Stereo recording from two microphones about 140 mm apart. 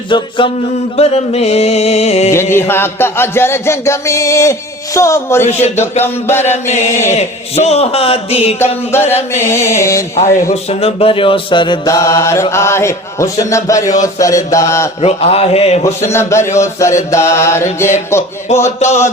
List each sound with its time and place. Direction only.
0.1 s mantra: 35° left (ahead or behind)
0.9 s speech: 50° left (ahead or behind)
2.3 s music: 15° left (ahead or behind)
4.9 s chant: 20° left (ahead or behind)
6.0 s music: 15° left (ahead or behind)
6.5 s speech: 55° left (ahead or behind)
8.9 s music: 15° left (ahead or behind)
10.5 s mantra: 45° left (ahead or behind)
11.9 s chant: 20° left (ahead or behind)
15.0 s speech: 45° left (ahead or behind)
15.8 s chant: 20° left (ahead or behind)